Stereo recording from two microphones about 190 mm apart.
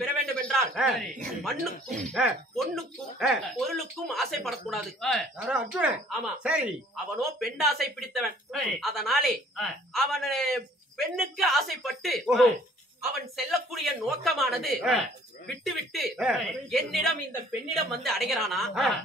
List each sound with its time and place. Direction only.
0.4 s a man's voice: centre (ahead or behind)
1.9 s speech: 40° right (ahead or behind)
2.1 s speech: centre (ahead or behind)
13.5 s speech: centre (ahead or behind)